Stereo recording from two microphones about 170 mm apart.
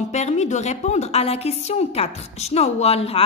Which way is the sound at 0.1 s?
40° left (ahead or behind).